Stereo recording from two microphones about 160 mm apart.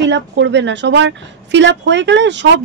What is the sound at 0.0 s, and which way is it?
Speech, 90° right.